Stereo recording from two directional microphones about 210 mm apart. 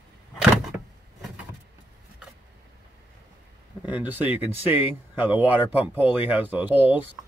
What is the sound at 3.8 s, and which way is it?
Speech, 10° right (ahead or behind).